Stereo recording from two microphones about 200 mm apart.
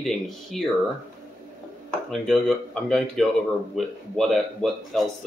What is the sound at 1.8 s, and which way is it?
Speech, 5° left (ahead or behind).